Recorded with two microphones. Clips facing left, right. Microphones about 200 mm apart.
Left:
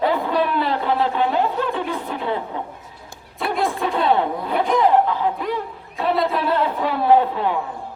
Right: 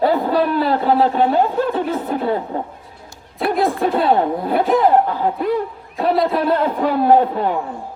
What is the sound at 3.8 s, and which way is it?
Speech, 40° right (ahead or behind).